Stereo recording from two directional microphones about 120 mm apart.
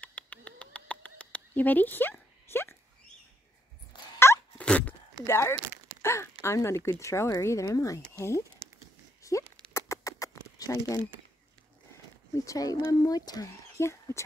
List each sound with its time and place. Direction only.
0.0 s bird: 10° left (ahead or behind)
3.9 s a sound: 40° left (ahead or behind)
4.6 s dog: 10° left (ahead or behind)
5.2 s speech: 25° left (ahead or behind)
9.2 s a sound: 30° left (ahead or behind)
9.8 s rodents: 25° left (ahead or behind)
12.4 s speech: 30° left (ahead or behind)